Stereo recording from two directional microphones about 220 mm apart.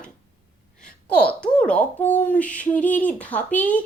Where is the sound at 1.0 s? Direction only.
5° left (ahead or behind).